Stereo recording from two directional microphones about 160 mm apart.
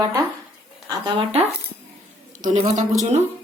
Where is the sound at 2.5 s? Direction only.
45° right (ahead or behind).